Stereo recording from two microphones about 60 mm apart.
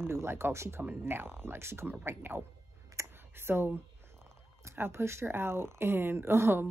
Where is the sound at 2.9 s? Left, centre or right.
Right.